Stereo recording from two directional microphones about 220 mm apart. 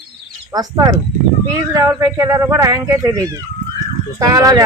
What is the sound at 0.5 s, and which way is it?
Speech, 15° right (ahead or behind).